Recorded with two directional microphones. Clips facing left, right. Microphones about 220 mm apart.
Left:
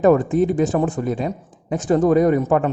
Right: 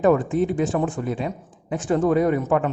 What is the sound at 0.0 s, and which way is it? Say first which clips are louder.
A man's voice: left 4 dB; 40° left (ahead or behind).